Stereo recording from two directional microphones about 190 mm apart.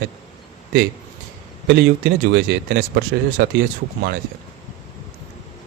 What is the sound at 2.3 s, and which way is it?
Speech, 65° right (ahead or behind).